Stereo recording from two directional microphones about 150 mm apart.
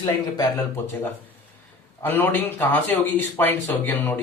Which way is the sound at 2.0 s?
15° left (ahead or behind).